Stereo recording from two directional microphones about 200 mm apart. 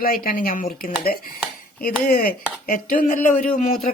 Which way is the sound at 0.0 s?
45° left (ahead or behind).